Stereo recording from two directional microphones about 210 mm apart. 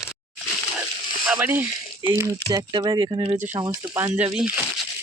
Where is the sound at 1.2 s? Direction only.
5° right (ahead or behind).